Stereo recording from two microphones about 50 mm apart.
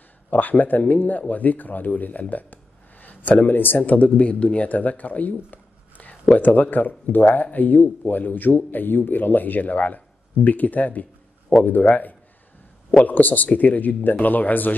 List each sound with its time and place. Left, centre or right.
0.3 s speech: left